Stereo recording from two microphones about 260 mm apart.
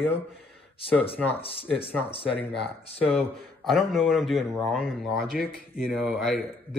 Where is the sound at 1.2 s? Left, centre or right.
Centre.